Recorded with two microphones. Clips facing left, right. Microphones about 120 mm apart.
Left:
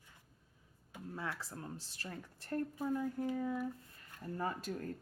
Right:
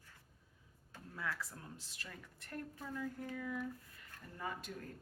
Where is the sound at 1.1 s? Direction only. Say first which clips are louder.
Left 1 dB; 25° left (ahead or behind).